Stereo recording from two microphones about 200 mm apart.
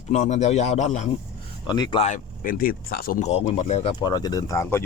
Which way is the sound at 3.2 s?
30° left (ahead or behind).